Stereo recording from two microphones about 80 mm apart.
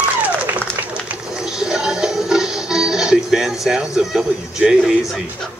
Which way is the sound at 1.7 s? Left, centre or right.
Centre.